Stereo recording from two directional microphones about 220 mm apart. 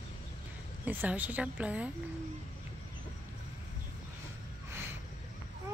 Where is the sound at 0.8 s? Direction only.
5° right (ahead or behind).